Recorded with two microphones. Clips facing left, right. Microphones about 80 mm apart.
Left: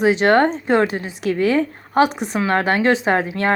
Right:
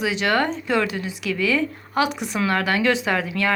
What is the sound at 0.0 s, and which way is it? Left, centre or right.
Speech, left.